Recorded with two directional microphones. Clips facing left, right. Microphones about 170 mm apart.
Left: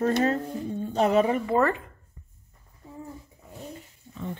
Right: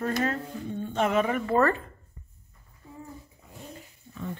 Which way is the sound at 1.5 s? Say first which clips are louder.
Even; 15° left (ahead or behind).